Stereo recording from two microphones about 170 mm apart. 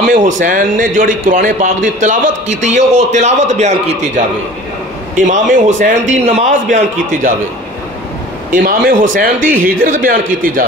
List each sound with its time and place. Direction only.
0.0 s a man's voice: 50° right (ahead or behind)
5.1 s a man's voice: 50° right (ahead or behind)
8.5 s speech: 55° right (ahead or behind)